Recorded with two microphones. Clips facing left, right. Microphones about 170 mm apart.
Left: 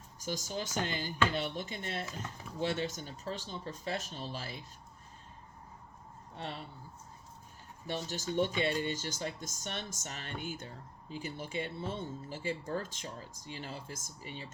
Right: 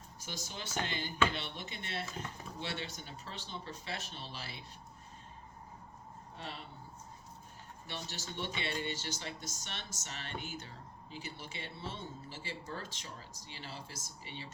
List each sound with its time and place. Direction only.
0.2 s speech: 45° left (ahead or behind)
7.9 s speech: 45° left (ahead or behind)